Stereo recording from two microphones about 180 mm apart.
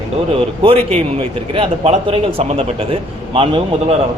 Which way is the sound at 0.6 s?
35° right (ahead or behind).